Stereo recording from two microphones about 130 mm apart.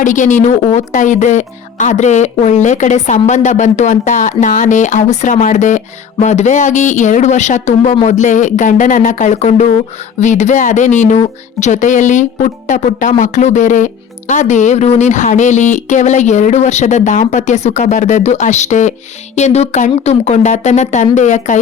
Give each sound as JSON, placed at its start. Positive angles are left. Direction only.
{"t": 0.0, "sound": "speech", "side_deg": 75}